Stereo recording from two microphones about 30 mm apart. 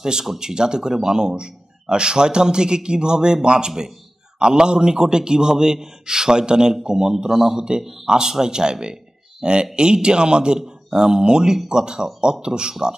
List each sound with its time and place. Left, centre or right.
0.0 s a man's voice: right